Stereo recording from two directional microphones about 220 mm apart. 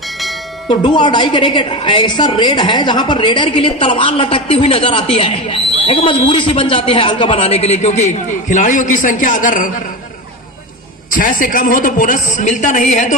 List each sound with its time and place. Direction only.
0.7 s a woman's voice: 20° left (ahead or behind); by 9.7 s 35° left (ahead or behind)
11.1 s a woman's voice: 40° left (ahead or behind)